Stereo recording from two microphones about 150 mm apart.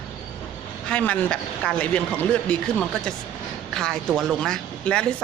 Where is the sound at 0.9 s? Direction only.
10° left (ahead or behind).